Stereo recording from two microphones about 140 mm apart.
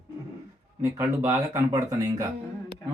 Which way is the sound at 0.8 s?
20° right (ahead or behind).